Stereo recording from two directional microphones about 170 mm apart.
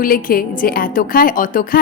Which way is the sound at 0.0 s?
55° left (ahead or behind).